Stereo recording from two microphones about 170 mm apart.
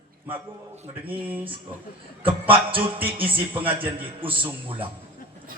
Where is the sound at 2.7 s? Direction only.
10° right (ahead or behind).